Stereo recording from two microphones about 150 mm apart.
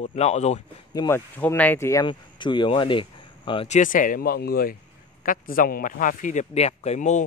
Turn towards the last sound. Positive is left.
turn(degrees=55)  # may be behind; listen again after turning